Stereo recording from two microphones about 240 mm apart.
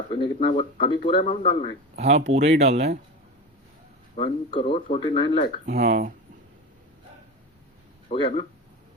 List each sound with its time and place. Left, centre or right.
0.1 s speech: left
1.1 s speech: left
2.0 s speech: right
4.1 s speech: left
5.6 s speech: right
8.1 s speech: left